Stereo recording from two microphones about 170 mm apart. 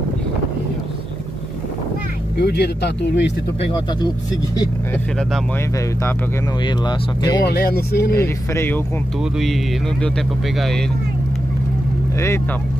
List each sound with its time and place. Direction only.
2.3 s speech: 75° left (ahead or behind)
3.6 s speech: 25° left (ahead or behind)
6.6 s speech: 25° left (ahead or behind)
7.4 s speech: 65° left (ahead or behind)
8.1 s speech: 15° left (ahead or behind)
9.2 s speech: centre (ahead or behind)
10.6 s speech: 5° left (ahead or behind)